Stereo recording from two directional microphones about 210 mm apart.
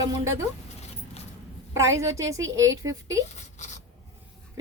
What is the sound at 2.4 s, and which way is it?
Speech, 65° right (ahead or behind).